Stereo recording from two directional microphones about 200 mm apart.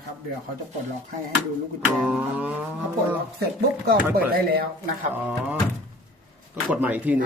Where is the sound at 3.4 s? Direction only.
50° right (ahead or behind).